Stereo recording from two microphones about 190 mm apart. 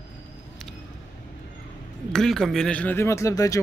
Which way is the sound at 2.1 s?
Centre (ahead or behind).